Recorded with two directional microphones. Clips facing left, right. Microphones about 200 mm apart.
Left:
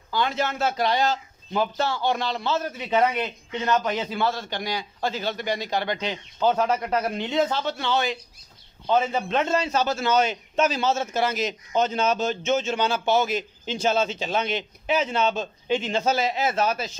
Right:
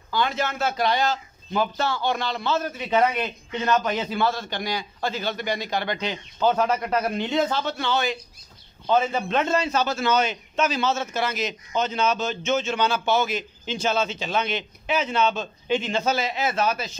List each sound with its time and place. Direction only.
0.1 s a man's voice: 30° left (ahead or behind)
9.8 s a man's voice: 40° left (ahead or behind)